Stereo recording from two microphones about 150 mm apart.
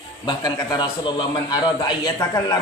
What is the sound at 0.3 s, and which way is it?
A man's voice, 30° left (ahead or behind).